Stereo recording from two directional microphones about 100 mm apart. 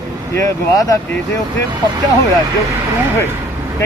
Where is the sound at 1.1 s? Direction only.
20° left (ahead or behind).